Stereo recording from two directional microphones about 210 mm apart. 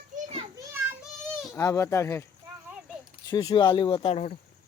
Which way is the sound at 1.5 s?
15° left (ahead or behind).